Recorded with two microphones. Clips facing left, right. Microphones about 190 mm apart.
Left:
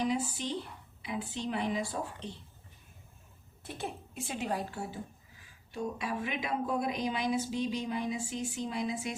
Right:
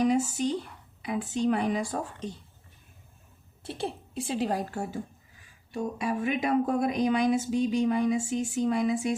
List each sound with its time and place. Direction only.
0.1 s speech: 45° right (ahead or behind)
3.6 s speech: 30° right (ahead or behind); by 9.1 s 50° right (ahead or behind)